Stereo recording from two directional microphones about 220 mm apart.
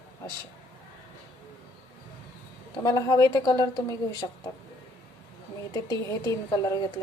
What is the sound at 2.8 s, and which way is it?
A woman's voice, 15° left (ahead or behind).